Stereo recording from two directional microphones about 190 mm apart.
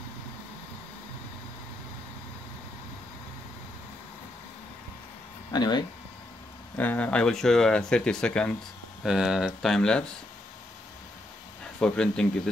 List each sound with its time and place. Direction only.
5.5 s speech: 20° left (ahead or behind)
6.8 s speech: 10° left (ahead or behind)
11.8 s speech: 5° left (ahead or behind)